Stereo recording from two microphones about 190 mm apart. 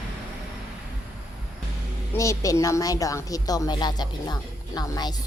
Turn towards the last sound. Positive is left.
turn(degrees=20)  # may be behind; listen again after turning